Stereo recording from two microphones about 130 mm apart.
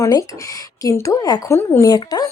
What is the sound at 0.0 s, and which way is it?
Speech, 25° left (ahead or behind).